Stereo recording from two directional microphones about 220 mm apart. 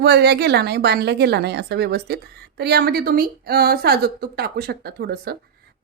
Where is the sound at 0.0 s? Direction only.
50° right (ahead or behind).